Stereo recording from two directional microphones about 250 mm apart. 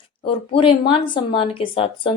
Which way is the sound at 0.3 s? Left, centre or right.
Left.